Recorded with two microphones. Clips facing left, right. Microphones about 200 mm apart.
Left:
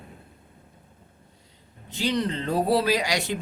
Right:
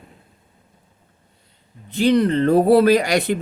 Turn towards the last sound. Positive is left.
turn(degrees=-55)  # may be behind; listen again after turning